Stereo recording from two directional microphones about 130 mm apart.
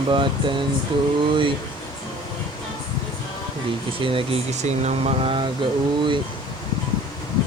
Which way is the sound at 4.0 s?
45° right (ahead or behind).